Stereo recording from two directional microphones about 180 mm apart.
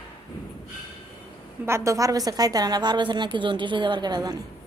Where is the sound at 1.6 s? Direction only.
15° right (ahead or behind).